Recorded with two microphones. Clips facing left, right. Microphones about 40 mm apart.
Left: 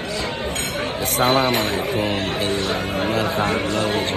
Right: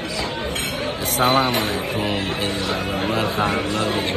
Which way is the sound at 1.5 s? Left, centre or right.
Left.